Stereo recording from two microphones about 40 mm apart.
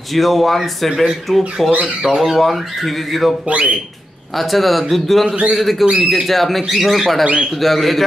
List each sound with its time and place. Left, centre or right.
0.1 s speech: centre
3.4 s speech: right
4.4 s speech: centre